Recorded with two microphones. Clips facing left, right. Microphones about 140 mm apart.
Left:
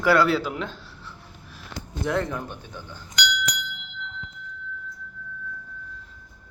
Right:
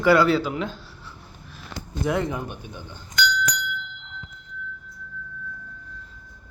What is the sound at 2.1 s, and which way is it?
Speech, 15° right (ahead or behind).